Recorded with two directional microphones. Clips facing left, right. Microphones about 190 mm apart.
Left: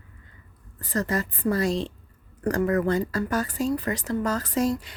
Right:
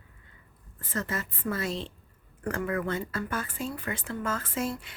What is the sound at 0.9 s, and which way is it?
Speech, 40° left (ahead or behind).